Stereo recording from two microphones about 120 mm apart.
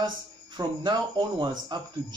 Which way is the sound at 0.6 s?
40° right (ahead or behind).